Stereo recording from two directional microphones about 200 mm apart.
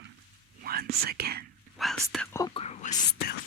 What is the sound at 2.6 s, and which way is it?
Whispering, 35° left (ahead or behind).